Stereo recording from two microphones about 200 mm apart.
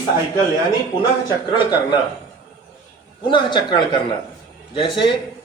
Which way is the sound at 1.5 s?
20° left (ahead or behind).